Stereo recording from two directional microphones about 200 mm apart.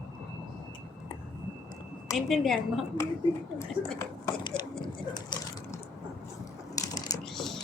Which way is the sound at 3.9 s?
15° left (ahead or behind).